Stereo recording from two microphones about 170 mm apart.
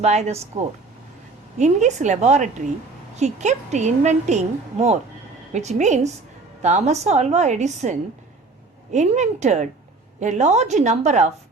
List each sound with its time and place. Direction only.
0.0 s a woman's voice: 40° right (ahead or behind)
1.5 s a woman's voice: 45° right (ahead or behind)